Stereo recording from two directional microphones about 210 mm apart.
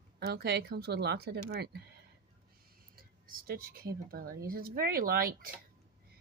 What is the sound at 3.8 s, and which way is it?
Speech, 45° right (ahead or behind).